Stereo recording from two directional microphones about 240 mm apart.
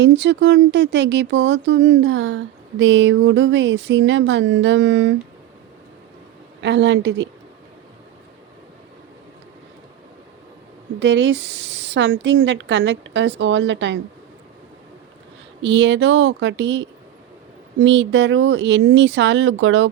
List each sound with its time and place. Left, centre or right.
0.0 s speech: right
6.6 s speech: right
11.0 s speech: right
15.6 s speech: right